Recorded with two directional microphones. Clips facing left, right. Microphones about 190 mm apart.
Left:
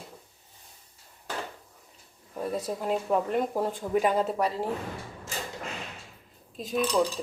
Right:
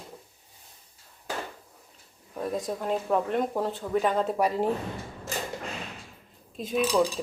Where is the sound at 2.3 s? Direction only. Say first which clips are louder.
Right 1 dB; 5° left (ahead or behind).